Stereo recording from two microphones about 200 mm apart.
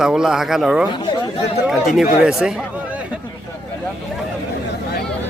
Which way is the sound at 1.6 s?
Centre (ahead or behind).